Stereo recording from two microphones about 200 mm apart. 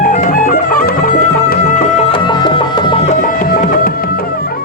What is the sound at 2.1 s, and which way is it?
Music, 25° left (ahead or behind).